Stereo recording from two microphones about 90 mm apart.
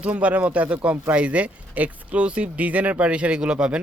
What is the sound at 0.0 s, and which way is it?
Speech, 15° right (ahead or behind).